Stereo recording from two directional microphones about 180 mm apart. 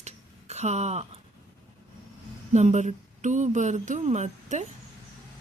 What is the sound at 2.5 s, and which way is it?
Speech, 40° right (ahead or behind).